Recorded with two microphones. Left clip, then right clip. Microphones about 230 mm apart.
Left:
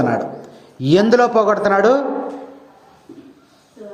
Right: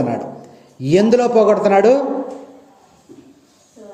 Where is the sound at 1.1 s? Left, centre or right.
Centre.